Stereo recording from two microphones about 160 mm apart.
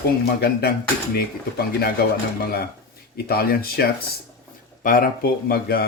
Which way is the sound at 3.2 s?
70° left (ahead or behind).